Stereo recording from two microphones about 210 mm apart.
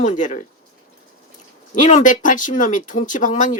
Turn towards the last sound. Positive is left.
turn(degrees=40)  # may be behind; listen again after turning